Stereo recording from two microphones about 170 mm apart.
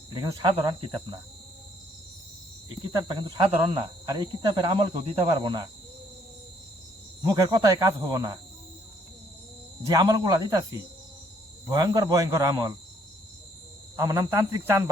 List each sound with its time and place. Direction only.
0.1 s speech: 20° right (ahead or behind)
2.6 s speech: 25° right (ahead or behind)
7.2 s speech: 25° right (ahead or behind)
9.9 s speech: 20° right (ahead or behind)
13.9 s speech: 20° right (ahead or behind)